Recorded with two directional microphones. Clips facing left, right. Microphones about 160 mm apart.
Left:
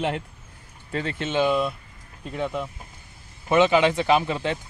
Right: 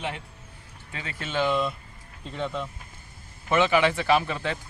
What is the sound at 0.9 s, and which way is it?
Speech, 40° left (ahead or behind).